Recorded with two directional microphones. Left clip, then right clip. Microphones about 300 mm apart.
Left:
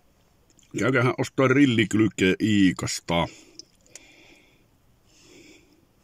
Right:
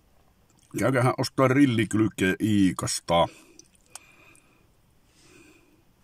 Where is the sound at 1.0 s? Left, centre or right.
Right.